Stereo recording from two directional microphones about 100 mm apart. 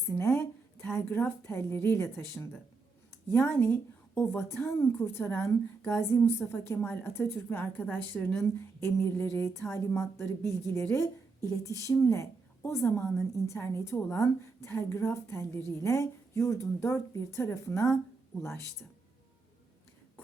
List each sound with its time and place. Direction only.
0.1 s a woman's voice: 25° left (ahead or behind)
8.4 s speech: 25° left (ahead or behind)